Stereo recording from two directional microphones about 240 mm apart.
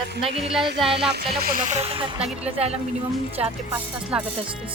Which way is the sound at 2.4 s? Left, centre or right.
Right.